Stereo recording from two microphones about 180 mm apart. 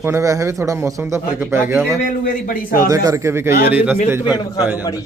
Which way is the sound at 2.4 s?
50° left (ahead or behind).